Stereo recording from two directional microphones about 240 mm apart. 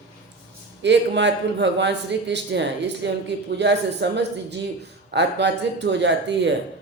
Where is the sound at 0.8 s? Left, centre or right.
Right.